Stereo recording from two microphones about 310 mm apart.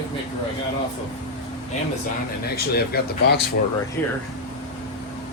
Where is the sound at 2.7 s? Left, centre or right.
Left.